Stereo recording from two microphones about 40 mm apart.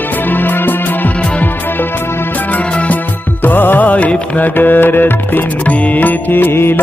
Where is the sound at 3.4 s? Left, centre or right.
Left.